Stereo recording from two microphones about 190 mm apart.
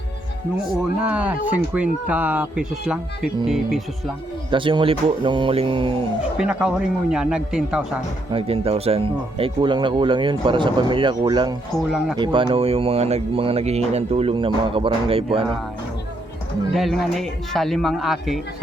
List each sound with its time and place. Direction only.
0.8 s speech: 5° right (ahead or behind)
4.5 s speech: 25° right (ahead or behind)
6.3 s speech: 5° right (ahead or behind)
8.3 s speech: 30° right (ahead or behind)
11.9 s speech: 5° right (ahead or behind)
12.1 s speech: 25° right (ahead or behind)
16.7 s speech: centre (ahead or behind)